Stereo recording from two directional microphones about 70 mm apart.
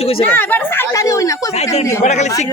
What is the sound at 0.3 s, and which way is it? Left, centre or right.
Speech, left.